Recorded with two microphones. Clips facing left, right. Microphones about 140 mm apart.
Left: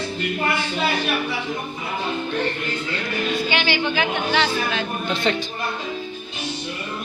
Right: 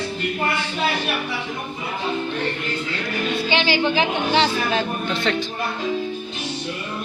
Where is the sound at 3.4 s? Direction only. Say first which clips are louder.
Right 2 dB; 30° right (ahead or behind).